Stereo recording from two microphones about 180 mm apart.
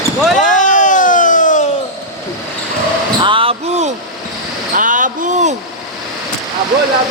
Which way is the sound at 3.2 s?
30° right (ahead or behind).